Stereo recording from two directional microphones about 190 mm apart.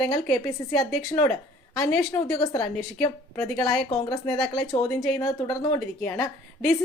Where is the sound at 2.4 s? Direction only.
20° left (ahead or behind).